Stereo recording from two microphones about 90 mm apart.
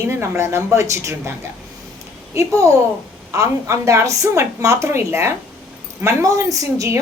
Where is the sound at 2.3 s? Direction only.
35° right (ahead or behind).